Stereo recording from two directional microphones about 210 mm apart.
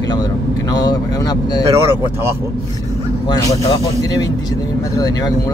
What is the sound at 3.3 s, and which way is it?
Speech, 20° left (ahead or behind).